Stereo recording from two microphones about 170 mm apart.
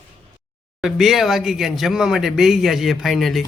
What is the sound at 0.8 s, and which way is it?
Speech, centre (ahead or behind).